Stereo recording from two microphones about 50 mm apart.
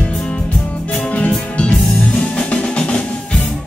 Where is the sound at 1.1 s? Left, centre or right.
Left.